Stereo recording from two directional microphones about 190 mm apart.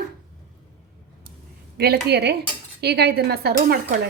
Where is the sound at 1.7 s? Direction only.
60° right (ahead or behind).